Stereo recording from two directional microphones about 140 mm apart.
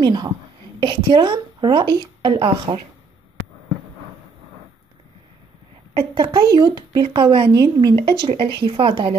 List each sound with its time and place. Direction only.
0.0 s a woman's voice: 30° right (ahead or behind)
5.9 s a woman's voice: 35° right (ahead or behind)